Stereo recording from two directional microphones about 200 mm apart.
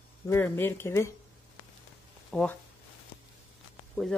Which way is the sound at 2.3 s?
5° left (ahead or behind).